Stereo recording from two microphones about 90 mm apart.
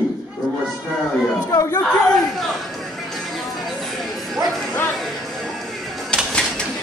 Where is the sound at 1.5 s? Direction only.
45° left (ahead or behind).